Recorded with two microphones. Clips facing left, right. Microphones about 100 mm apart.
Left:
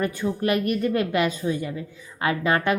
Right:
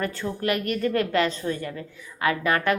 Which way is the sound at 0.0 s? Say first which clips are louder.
Left 3 dB; 15° left (ahead or behind).